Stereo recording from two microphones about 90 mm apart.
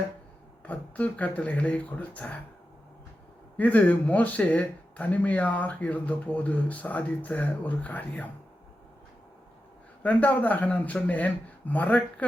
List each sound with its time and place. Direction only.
0.6 s speech: 15° left (ahead or behind)
3.6 s speech: 20° left (ahead or behind)
10.0 s speech: 20° left (ahead or behind)